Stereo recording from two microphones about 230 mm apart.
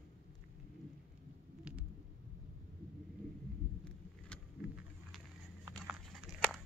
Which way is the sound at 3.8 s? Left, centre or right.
Centre.